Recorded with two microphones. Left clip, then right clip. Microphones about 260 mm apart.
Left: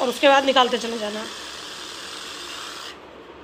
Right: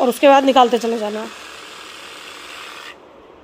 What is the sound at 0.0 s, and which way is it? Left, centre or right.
Speech, right.